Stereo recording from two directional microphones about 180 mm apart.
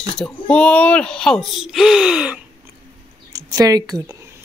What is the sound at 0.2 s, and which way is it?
Speech, 5° left (ahead or behind).